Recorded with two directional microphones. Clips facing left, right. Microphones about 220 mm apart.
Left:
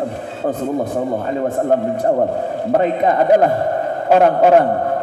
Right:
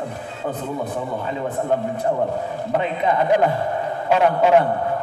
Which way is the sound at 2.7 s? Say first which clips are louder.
Left 6 dB; 45° left (ahead or behind).